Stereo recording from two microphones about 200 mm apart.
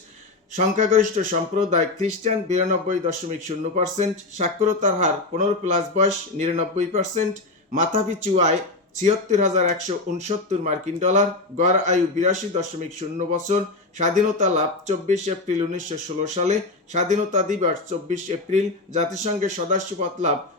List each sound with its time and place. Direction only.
0.5 s speech: 40° right (ahead or behind)